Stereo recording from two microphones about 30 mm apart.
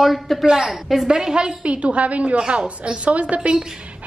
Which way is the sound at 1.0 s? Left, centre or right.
Right.